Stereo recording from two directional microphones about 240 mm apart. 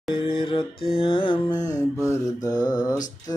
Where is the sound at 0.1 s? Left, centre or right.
Left.